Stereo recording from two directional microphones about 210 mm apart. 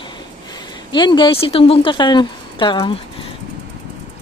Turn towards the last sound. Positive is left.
turn(degrees=25)  # may be behind; listen again after turning